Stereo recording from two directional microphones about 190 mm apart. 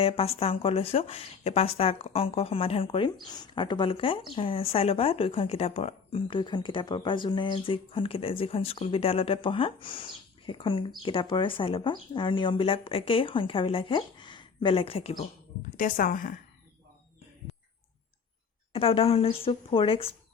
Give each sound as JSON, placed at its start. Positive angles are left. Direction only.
{"t": 0.0, "sound": "speech", "side_deg": 30}
{"t": 15.8, "sound": "a woman's voice", "side_deg": 45}
{"t": 18.7, "sound": "speech", "side_deg": 30}